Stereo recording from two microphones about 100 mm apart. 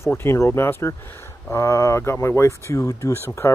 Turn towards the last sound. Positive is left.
turn(degrees=25)  # may be behind; listen again after turning